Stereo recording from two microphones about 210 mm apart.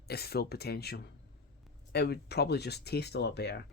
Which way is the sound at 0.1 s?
45° left (ahead or behind).